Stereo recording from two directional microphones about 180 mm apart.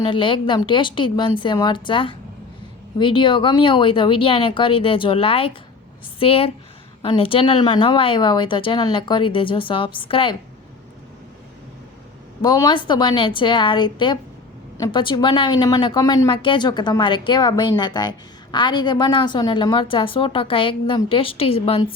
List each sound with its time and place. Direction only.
0.0 s a woman's voice: 25° left (ahead or behind)
12.4 s a woman's voice: 20° left (ahead or behind)